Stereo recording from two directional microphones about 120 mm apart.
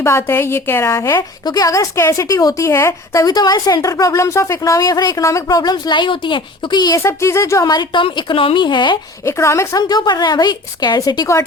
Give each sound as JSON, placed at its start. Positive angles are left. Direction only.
{"t": 0.0, "sound": "a woman's voice", "side_deg": 20}
{"t": 9.2, "sound": "a woman's voice", "side_deg": 25}
{"t": 9.9, "sound": "a woman's voice", "side_deg": 35}